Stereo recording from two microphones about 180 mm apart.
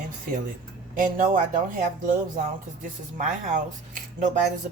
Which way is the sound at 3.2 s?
45° right (ahead or behind).